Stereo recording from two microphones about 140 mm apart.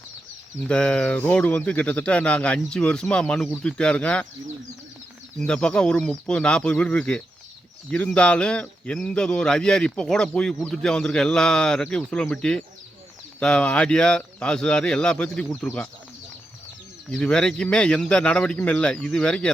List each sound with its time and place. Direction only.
0.7 s speech: 5° left (ahead or behind)
5.4 s speech: 5° left (ahead or behind)
17.1 s speech: 5° left (ahead or behind)